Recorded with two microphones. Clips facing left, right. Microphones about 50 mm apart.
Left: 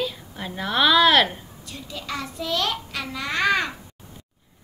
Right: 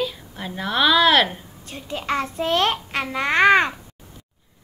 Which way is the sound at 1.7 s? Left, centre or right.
Right.